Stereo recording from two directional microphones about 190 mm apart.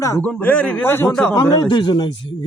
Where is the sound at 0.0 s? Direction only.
15° left (ahead or behind).